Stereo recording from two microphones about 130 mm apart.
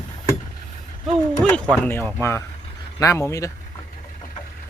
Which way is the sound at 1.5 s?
10° left (ahead or behind).